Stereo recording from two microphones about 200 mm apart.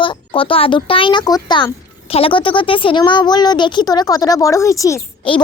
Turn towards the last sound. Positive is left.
turn(degrees=25)  # may be behind; listen again after turning